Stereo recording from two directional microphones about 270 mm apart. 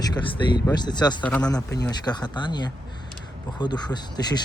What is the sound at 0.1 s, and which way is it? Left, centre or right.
Speech, centre.